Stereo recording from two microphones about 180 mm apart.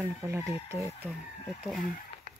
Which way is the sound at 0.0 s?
15° right (ahead or behind).